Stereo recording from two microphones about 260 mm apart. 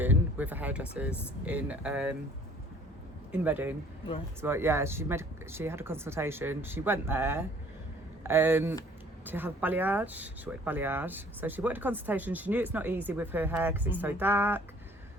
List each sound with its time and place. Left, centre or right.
0.0 s speech: centre
3.3 s speech: centre